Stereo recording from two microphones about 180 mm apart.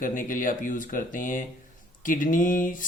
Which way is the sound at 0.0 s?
45° left (ahead or behind).